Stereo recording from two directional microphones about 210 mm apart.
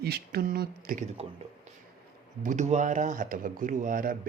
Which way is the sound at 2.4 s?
35° right (ahead or behind).